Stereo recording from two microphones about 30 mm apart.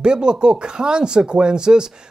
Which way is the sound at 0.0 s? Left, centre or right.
Right.